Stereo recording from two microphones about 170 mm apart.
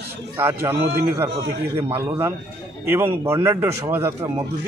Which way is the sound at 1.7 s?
15° right (ahead or behind).